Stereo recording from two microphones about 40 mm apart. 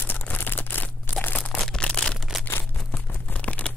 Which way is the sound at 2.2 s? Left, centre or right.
Centre.